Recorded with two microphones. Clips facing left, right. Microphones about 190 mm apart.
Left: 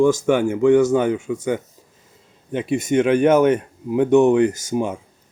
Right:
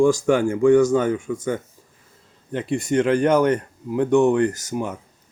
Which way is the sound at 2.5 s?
20° left (ahead or behind).